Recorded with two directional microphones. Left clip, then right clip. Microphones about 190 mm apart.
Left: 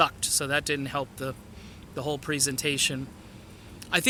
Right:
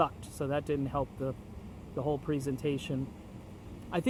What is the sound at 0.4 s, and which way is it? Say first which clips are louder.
Speech: left 3 dB; 10° left (ahead or behind).